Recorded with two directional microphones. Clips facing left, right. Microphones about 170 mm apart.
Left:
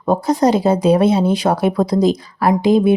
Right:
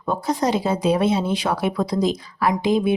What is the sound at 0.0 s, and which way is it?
A woman's voice, 40° left (ahead or behind).